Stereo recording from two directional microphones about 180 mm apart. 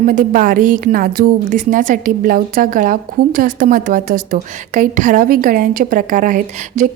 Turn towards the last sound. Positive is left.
turn(degrees=-45)  # may be behind; listen again after turning